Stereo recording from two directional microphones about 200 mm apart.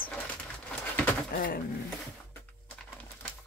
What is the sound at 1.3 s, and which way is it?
Speech, 50° left (ahead or behind).